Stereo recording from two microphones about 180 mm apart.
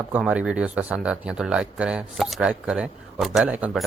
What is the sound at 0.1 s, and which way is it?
Speech, 5° right (ahead or behind).